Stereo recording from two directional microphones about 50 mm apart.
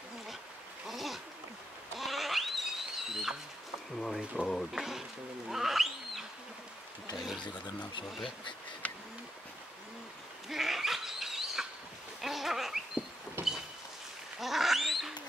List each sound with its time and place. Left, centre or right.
0.8 s a sound: centre
2.0 s goat: centre
4.4 s speech: right
4.7 s speech: centre
5.5 s a sound: centre
8.8 s bird: left
10.5 s goat: centre
12.2 s a sound: centre
14.4 s duck: centre